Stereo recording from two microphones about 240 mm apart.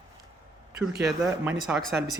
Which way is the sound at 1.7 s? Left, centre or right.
Centre.